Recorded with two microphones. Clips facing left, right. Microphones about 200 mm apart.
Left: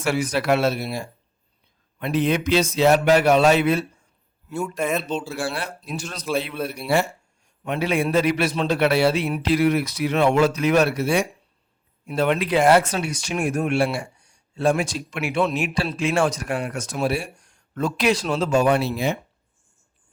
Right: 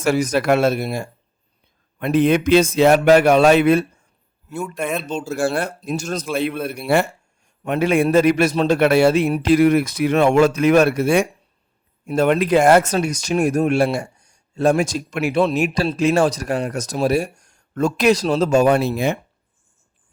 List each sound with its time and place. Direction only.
0.0 s a man's voice: 40° right (ahead or behind)
4.5 s speech: centre (ahead or behind)
5.1 s a man's voice: 45° right (ahead or behind)